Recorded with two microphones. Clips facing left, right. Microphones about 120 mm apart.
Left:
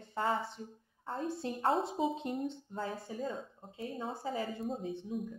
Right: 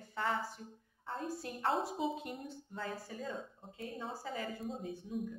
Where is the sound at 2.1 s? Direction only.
25° left (ahead or behind).